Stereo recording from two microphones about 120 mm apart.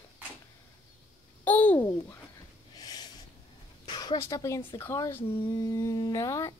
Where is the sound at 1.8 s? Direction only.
25° left (ahead or behind).